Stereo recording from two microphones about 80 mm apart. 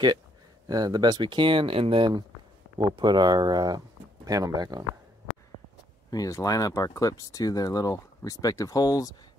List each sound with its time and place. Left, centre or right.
0.7 s speech: right
2.8 s speech: right
6.0 s speech: left